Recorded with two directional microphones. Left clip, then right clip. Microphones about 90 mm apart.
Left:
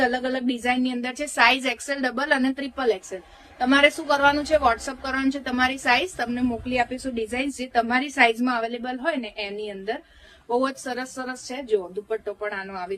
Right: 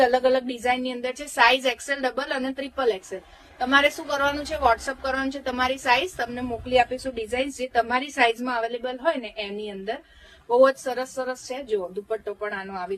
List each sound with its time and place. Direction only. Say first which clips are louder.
0.0 s a woman's voice: right 4 dB; 35° left (ahead or behind)